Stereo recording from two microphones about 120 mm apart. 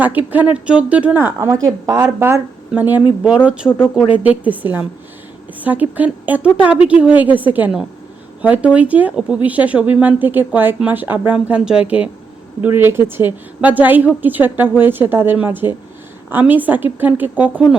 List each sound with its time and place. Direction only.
0.0 s a woman's voice: 15° right (ahead or behind)